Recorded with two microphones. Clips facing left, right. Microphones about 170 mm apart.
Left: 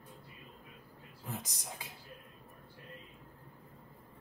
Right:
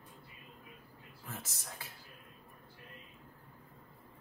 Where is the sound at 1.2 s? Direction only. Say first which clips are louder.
Left 4 dB; 15° left (ahead or behind).